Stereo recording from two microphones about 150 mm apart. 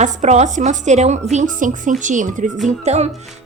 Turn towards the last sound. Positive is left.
turn(degrees=-45)  # may be behind; listen again after turning